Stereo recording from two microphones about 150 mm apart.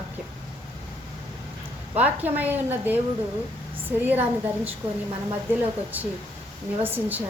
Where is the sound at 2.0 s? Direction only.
10° right (ahead or behind).